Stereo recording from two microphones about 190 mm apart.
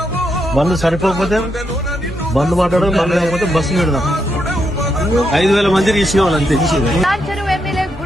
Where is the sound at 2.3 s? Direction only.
Centre (ahead or behind).